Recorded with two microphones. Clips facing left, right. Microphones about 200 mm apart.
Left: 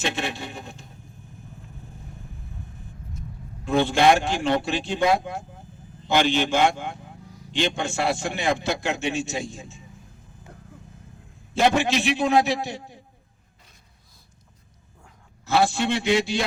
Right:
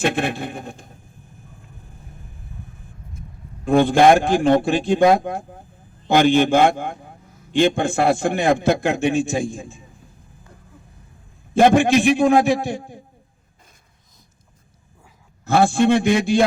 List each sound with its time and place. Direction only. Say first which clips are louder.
0.0 s a man's voice: right 7 dB; 55° right (ahead or behind)
3.7 s a man's voice: right 6 dB; 50° right (ahead or behind)
11.5 s a man's voice: right 7 dB; 50° right (ahead or behind)
15.4 s a man's voice: right 6 dB; 50° right (ahead or behind)